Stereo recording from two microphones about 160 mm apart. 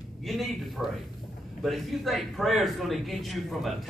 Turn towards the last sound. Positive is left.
turn(degrees=0)  # may be behind; listen again after turning